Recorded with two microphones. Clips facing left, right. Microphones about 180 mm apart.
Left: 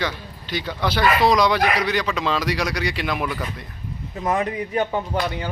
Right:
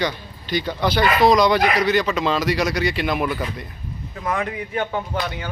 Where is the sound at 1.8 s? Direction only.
5° right (ahead or behind).